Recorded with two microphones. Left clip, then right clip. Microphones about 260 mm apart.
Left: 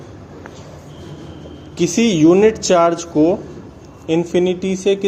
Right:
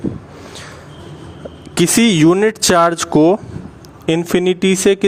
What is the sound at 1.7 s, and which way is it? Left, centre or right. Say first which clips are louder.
A man's voice: right 3 dB; right.